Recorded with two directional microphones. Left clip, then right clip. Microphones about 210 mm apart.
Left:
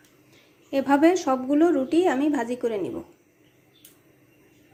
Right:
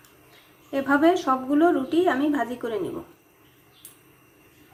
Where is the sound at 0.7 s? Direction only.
25° left (ahead or behind).